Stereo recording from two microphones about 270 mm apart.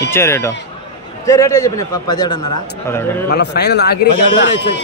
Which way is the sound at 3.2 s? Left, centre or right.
Left.